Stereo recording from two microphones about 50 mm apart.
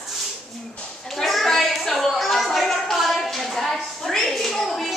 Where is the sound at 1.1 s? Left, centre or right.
Centre.